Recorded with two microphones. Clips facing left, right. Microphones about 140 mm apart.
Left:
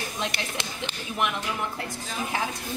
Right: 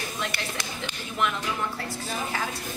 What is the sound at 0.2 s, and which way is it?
Speech, 25° left (ahead or behind).